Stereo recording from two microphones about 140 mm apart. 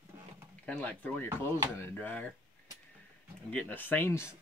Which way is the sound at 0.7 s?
10° left (ahead or behind).